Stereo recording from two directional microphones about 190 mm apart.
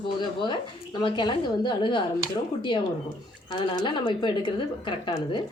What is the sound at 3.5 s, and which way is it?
A woman's voice, 20° left (ahead or behind).